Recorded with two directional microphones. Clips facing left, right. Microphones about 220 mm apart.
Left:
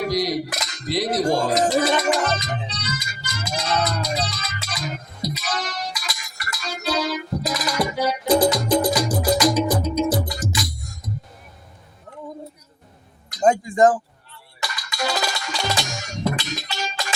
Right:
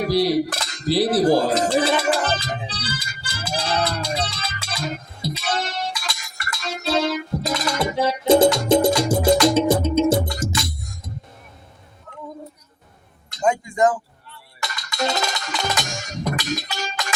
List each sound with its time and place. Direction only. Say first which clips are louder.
0.1 s cutlery: right 4 dB; 30° right (ahead or behind)
1.5 s speech: even; 30° right (ahead or behind)
2.0 s music: even; 30° right (ahead or behind)
13.4 s a sound: left 3 dB; 35° left (ahead or behind)
14.6 s music: right 2 dB; 20° right (ahead or behind)